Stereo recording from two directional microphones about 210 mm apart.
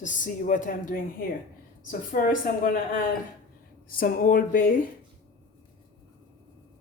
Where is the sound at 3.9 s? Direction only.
45° left (ahead or behind).